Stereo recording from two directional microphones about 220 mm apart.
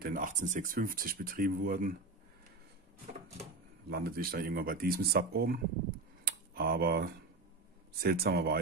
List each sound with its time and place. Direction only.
0.0 s speech: 40° right (ahead or behind)
3.9 s speech: 45° right (ahead or behind)
6.2 s tick-tock: 45° right (ahead or behind)
8.0 s speech: 45° right (ahead or behind)